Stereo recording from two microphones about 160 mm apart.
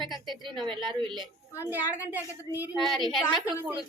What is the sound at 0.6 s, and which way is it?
Speech, centre (ahead or behind).